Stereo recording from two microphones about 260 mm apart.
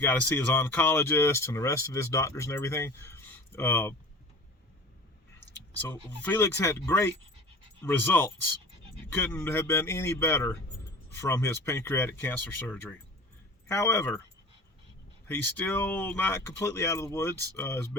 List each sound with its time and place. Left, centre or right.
0.0 s speech: centre
5.9 s speech: centre
15.3 s speech: centre